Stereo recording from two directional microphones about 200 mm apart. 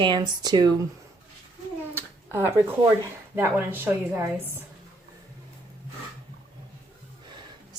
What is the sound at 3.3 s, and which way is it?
A woman's voice, 10° right (ahead or behind).